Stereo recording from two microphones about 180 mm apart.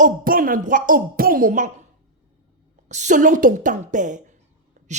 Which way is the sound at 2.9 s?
40° right (ahead or behind).